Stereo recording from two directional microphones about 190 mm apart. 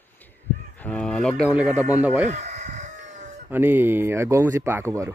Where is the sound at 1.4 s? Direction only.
10° right (ahead or behind).